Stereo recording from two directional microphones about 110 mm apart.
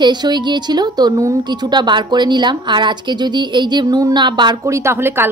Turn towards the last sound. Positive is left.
turn(degrees=-20)  # may be behind; listen again after turning